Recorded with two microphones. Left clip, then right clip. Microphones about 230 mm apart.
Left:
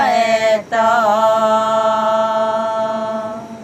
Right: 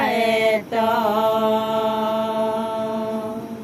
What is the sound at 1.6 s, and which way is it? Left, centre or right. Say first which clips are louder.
Music: left 7 dB; centre.